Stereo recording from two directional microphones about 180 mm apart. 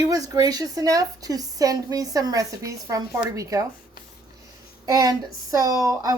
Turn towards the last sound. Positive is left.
turn(degrees=-20)  # may be behind; listen again after turning